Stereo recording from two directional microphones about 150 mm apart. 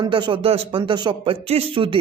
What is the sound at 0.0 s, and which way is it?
Speech, 30° right (ahead or behind).